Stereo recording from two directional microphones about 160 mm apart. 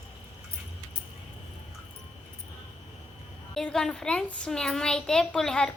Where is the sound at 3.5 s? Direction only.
5° left (ahead or behind).